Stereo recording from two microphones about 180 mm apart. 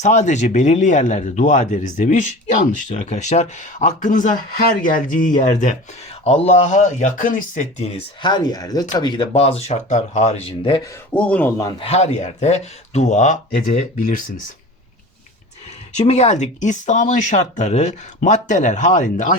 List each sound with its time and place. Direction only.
0.0 s speech: 40° left (ahead or behind)
8.2 s speech: 25° left (ahead or behind)
11.1 s speech: 5° left (ahead or behind)
11.8 s speech: 35° left (ahead or behind)
16.0 s speech: 35° left (ahead or behind)